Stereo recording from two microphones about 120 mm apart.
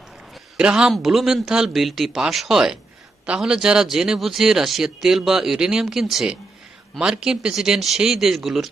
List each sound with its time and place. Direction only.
0.5 s speech: 5° right (ahead or behind)